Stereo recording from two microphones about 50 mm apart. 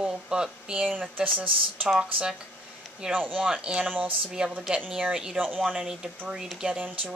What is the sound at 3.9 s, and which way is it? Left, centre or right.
Speech, right.